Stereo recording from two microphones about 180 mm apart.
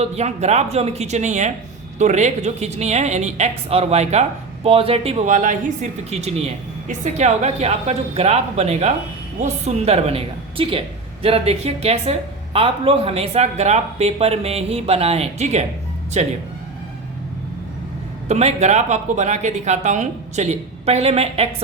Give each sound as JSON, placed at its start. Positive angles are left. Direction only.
{"t": 0.0, "sound": "a woman's voice", "side_deg": -35}
{"t": 18.3, "sound": "a woman's voice", "side_deg": -35}